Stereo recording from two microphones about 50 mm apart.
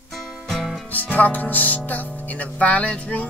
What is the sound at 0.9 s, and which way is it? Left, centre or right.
Music, left.